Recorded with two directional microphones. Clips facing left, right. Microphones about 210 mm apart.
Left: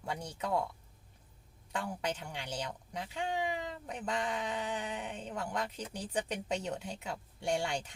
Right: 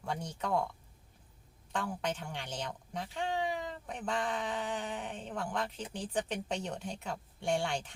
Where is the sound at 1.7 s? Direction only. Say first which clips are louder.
Right 1 dB; 10° left (ahead or behind).